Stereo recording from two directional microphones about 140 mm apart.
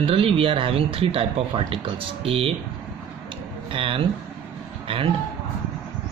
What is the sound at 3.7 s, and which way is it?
Speech, 40° right (ahead or behind).